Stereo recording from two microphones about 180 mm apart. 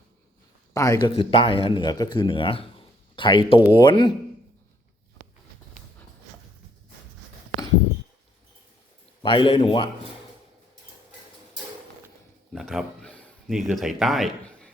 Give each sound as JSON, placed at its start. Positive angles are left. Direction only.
{"t": 0.7, "sound": "speech", "side_deg": 20}
{"t": 1.1, "sound": "speech", "side_deg": 30}
{"t": 9.2, "sound": "a man's voice", "side_deg": 30}
{"t": 12.5, "sound": "speech", "side_deg": 0}